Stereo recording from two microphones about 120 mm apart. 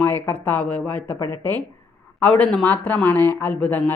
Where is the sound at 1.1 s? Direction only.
25° left (ahead or behind).